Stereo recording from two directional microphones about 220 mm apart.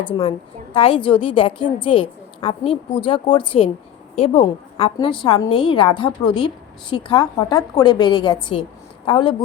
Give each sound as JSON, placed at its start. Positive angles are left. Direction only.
{"t": 0.0, "sound": "a woman's voice", "side_deg": 25}